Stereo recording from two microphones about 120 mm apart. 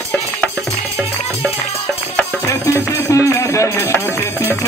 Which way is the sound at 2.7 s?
25° left (ahead or behind).